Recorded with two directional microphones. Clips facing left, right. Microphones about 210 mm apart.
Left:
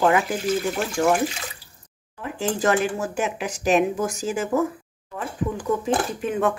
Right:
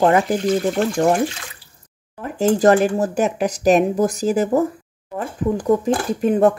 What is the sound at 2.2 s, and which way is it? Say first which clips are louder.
Speech: right 8 dB; 40° right (ahead or behind).